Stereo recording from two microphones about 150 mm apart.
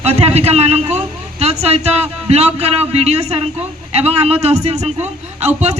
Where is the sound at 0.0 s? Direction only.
45° right (ahead or behind).